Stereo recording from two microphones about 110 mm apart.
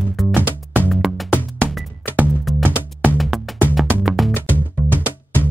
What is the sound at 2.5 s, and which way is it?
Music, centre (ahead or behind).